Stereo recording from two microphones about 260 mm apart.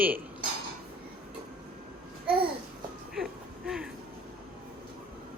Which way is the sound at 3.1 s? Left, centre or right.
Centre.